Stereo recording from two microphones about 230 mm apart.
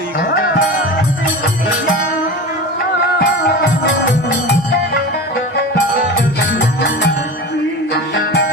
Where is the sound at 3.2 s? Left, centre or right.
Left.